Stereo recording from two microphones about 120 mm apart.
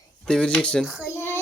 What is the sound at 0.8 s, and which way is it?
Speech, 5° right (ahead or behind).